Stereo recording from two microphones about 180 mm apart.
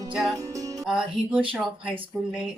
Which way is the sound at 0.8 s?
5° right (ahead or behind).